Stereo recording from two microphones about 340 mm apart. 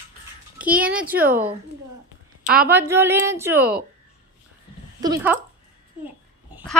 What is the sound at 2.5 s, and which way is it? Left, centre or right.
Speech, right.